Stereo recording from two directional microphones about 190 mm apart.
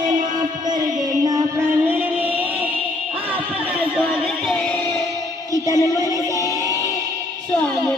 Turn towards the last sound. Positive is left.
turn(degrees=15)  # may be behind; listen again after turning